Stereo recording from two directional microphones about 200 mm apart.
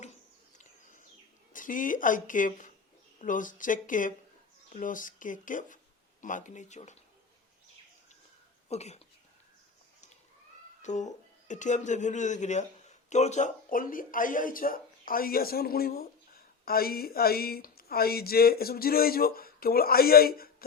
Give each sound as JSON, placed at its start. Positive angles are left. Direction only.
{"t": 1.5, "sound": "speech", "side_deg": 40}
{"t": 8.7, "sound": "speech", "side_deg": 35}
{"t": 10.8, "sound": "speech", "side_deg": 35}